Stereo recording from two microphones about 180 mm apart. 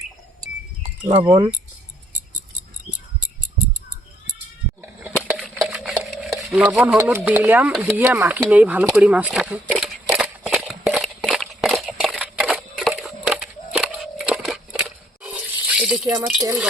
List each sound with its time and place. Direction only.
1.0 s speech: 20° right (ahead or behind)
5.3 s stir: centre (ahead or behind)
7.7 s speech: 5° right (ahead or behind)
10.1 s a sound: 5° right (ahead or behind)